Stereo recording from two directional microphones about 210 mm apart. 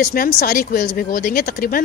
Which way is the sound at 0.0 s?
45° left (ahead or behind).